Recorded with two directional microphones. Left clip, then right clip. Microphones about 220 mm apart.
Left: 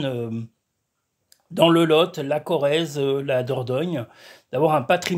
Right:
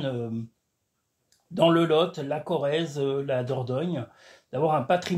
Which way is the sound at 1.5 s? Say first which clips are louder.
Left 4 dB; 45° left (ahead or behind).